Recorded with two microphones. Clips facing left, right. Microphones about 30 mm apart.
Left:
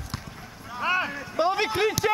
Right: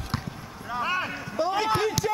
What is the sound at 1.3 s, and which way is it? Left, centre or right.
Speech, left.